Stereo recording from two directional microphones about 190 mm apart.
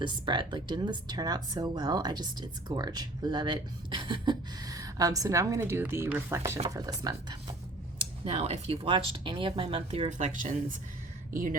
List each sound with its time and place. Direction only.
0.0 s speech: 25° right (ahead or behind)
7.9 s speech: 30° right (ahead or behind)